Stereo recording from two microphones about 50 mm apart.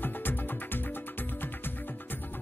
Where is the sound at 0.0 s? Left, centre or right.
Left.